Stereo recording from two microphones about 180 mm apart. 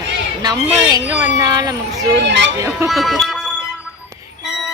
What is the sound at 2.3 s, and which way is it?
Speech, 80° right.